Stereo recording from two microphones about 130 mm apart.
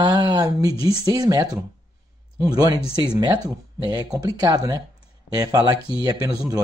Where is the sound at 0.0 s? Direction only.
30° right (ahead or behind).